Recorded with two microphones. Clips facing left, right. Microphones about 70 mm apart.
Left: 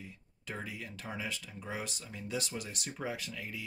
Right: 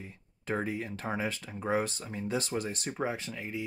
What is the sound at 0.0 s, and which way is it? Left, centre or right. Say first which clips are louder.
Speech: right 4 dB; right.